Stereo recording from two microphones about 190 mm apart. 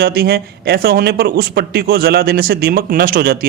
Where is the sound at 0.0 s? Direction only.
55° right (ahead or behind).